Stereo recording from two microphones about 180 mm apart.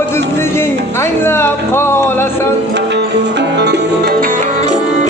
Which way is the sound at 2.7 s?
70° right (ahead or behind).